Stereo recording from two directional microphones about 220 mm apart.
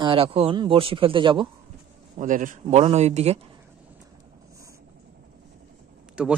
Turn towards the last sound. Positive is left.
turn(degrees=-5)  # may be behind; listen again after turning